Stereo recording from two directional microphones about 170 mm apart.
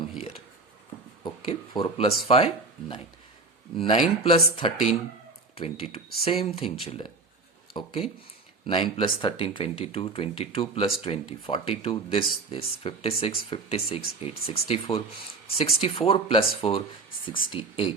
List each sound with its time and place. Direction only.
0.2 s a sound: 35° left (ahead or behind)
1.2 s speech: 30° left (ahead or behind)
3.8 s speech: 35° left (ahead or behind)